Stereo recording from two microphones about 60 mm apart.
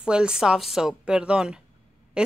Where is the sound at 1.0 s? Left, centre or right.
Centre.